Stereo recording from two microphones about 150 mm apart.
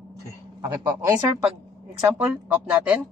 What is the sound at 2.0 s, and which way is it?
Speech, 10° right (ahead or behind).